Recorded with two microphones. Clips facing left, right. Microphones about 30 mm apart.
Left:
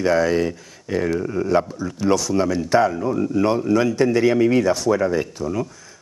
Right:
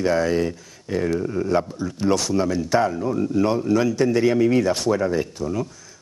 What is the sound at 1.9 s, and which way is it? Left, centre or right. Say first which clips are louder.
Speech: left 2 dB; centre.